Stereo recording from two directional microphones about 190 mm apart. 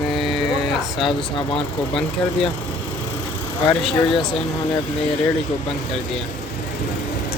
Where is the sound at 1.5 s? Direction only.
25° left (ahead or behind).